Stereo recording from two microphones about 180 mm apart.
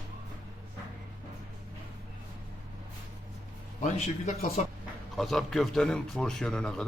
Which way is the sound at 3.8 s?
40° left (ahead or behind).